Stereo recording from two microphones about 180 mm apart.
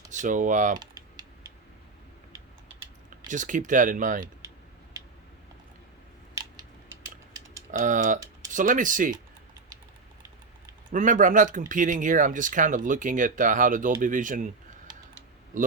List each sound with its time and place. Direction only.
0.1 s speech: 45° right (ahead or behind)
0.8 s typing: 25° right (ahead or behind)
3.2 s speech: 45° right (ahead or behind)
7.7 s speech: 45° right (ahead or behind)
10.9 s speech: 45° right (ahead or behind)
14.9 s typing: 25° right (ahead or behind)